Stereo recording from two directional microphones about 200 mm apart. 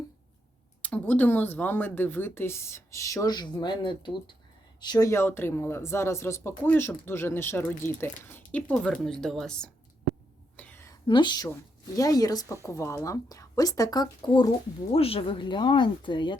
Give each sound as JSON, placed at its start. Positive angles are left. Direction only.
{"t": 0.8, "sound": "speech", "side_deg": 10}
{"t": 10.6, "sound": "a sound", "side_deg": 10}
{"t": 11.0, "sound": "speech", "side_deg": 25}